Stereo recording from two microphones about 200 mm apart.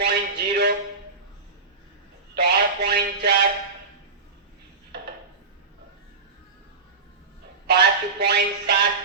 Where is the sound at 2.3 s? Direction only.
55° right (ahead or behind).